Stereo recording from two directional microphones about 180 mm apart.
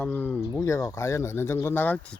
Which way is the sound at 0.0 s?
10° left (ahead or behind).